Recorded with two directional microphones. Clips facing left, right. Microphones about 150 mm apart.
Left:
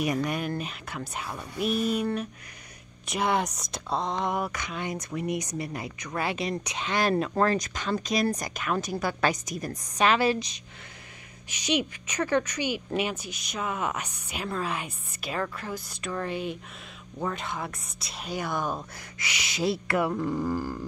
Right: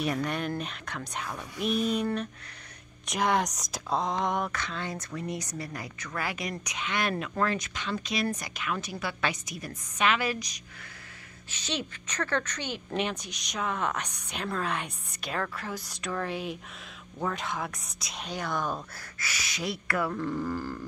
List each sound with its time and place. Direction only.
0.0 s a woman's voice: 10° left (ahead or behind); by 10.6 s 25° left (ahead or behind)
11.5 s a woman's voice: 15° left (ahead or behind)